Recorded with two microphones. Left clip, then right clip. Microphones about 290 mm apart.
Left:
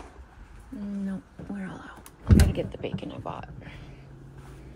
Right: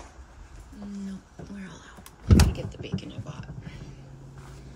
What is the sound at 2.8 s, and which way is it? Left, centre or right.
Speech, centre.